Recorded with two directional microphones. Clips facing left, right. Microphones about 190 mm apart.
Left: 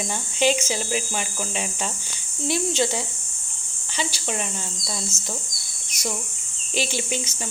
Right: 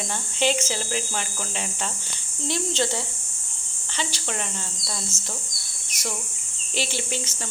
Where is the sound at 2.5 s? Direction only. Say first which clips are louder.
Left 3 dB; 10° left (ahead or behind).